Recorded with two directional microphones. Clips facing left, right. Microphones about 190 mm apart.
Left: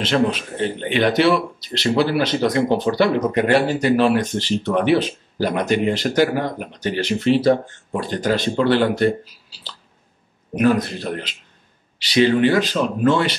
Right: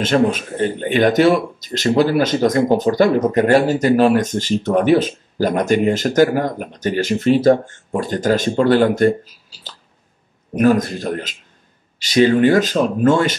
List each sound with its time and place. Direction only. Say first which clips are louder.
0.0 s speech: right 3 dB; 45° right (ahead or behind)